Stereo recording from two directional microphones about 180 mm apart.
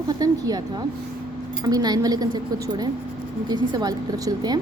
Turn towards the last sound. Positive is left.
turn(degrees=-20)  # may be behind; listen again after turning